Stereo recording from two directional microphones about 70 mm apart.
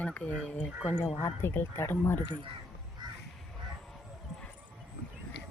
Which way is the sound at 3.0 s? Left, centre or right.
Right.